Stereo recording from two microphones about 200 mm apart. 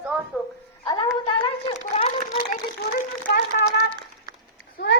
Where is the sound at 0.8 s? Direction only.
25° left (ahead or behind).